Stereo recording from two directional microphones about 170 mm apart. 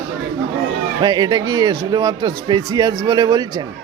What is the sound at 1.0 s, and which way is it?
Speech, 25° right (ahead or behind).